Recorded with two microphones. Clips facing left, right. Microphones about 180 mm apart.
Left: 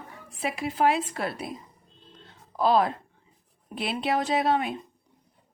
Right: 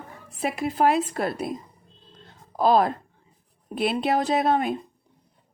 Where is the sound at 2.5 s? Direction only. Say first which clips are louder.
Right 3 dB; 45° right (ahead or behind).